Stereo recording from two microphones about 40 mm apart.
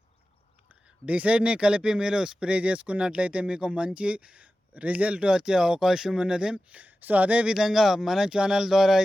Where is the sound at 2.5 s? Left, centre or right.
Right.